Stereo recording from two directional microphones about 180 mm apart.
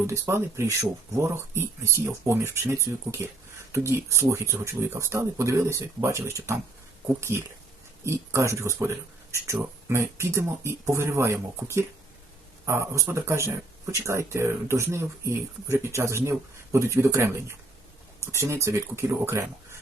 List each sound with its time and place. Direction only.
0.1 s speech: 15° right (ahead or behind)